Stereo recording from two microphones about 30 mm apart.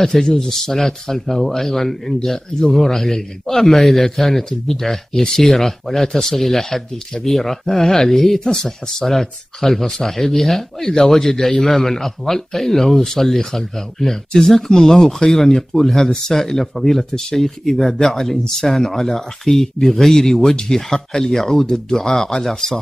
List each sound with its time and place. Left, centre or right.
0.0 s a man's voice: centre
10.8 s a man's voice: centre
21.7 s a man's voice: centre